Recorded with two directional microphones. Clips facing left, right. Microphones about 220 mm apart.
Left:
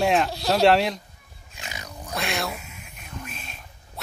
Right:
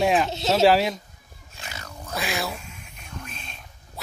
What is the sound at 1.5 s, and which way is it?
Cat, 15° left (ahead or behind).